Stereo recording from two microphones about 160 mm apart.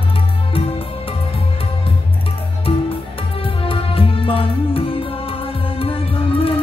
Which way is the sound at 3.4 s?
35° left (ahead or behind).